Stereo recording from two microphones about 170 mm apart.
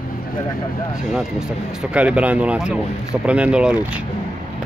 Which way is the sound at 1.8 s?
5° right (ahead or behind).